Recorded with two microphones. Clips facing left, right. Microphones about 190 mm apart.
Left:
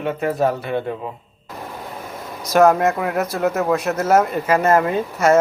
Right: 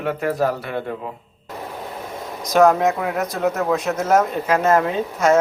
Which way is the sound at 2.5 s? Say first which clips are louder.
Left 1 dB; centre (ahead or behind).